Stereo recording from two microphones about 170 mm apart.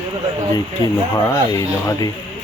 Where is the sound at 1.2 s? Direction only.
15° left (ahead or behind).